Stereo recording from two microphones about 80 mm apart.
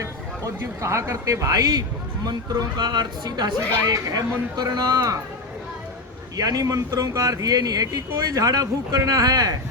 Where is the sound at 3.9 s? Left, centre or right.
Right.